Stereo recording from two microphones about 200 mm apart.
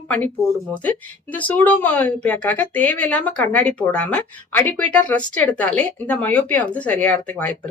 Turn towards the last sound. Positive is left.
turn(degrees=5)  # may be behind; listen again after turning